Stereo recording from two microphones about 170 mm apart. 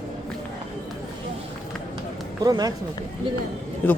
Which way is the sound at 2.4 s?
20° right (ahead or behind).